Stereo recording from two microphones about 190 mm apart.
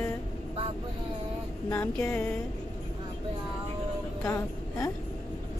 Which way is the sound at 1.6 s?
15° left (ahead or behind).